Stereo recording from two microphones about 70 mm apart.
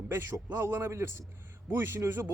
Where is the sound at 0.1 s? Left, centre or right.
Right.